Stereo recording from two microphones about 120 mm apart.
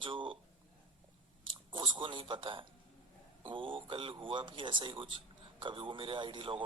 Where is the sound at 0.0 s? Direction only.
45° right (ahead or behind).